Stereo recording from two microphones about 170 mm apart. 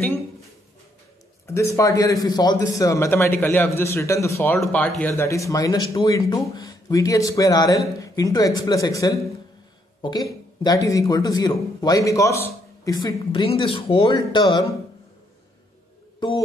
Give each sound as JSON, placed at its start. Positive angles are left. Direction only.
{"t": 1.8, "sound": "a man's voice", "side_deg": 20}